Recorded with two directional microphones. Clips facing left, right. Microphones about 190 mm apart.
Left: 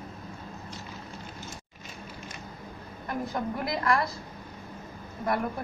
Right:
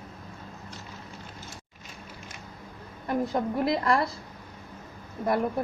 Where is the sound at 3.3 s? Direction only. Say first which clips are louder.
Right 4 dB; 30° right (ahead or behind).